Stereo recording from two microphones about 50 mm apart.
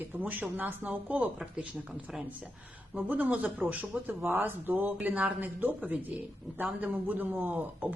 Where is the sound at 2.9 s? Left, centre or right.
Right.